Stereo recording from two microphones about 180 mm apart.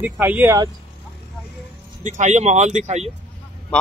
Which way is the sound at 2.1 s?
40° right (ahead or behind).